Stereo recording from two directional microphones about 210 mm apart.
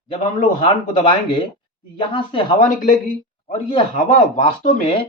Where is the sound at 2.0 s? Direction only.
25° left (ahead or behind).